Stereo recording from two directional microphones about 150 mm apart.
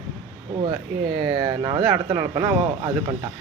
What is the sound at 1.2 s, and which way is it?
Speech, 25° right (ahead or behind).